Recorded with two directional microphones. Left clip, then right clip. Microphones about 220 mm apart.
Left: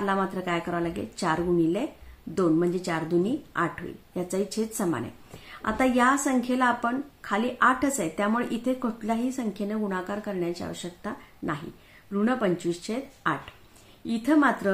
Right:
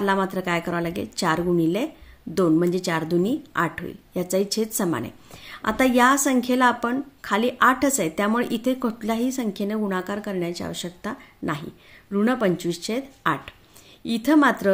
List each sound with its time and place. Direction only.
0.0 s a woman's voice: 40° right (ahead or behind)